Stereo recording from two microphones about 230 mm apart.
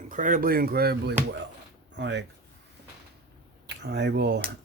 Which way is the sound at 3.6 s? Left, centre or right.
Right.